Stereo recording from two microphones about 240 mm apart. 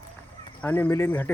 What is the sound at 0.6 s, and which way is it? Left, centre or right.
Speech, centre.